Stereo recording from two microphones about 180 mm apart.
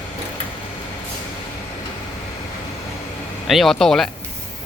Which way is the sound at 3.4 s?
Centre (ahead or behind).